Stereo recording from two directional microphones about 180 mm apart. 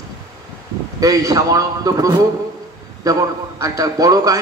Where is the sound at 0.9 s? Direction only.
20° right (ahead or behind).